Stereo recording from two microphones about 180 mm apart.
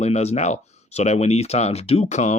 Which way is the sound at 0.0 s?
40° left (ahead or behind).